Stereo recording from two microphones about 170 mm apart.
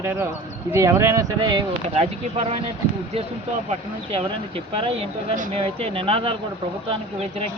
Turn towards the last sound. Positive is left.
turn(degrees=-35)  # may be behind; listen again after turning